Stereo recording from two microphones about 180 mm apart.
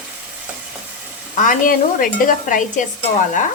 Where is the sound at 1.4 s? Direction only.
50° left (ahead or behind).